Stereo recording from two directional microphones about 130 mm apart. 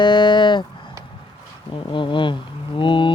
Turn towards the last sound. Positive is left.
turn(degrees=40)  # may be behind; listen again after turning